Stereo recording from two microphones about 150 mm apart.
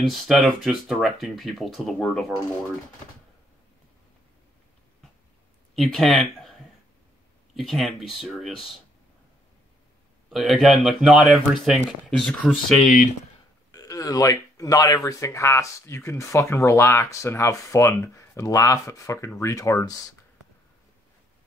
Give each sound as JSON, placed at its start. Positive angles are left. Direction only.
{"t": 0.0, "sound": "speech", "side_deg": 0}
{"t": 5.8, "sound": "speech", "side_deg": 0}
{"t": 10.3, "sound": "speech", "side_deg": 0}
{"t": 13.7, "sound": "a sound", "side_deg": 25}
{"t": 15.0, "sound": "speech", "side_deg": 20}